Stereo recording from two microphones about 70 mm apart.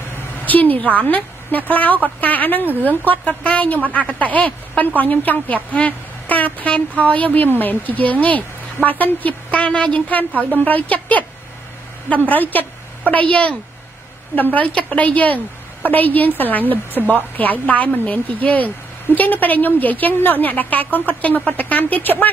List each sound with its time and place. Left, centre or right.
0.1 s a sound: left
1.7 s a woman's voice: left
12.3 s a woman's voice: left